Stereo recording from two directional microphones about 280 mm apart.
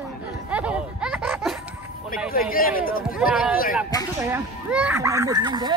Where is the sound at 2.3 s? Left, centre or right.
Left.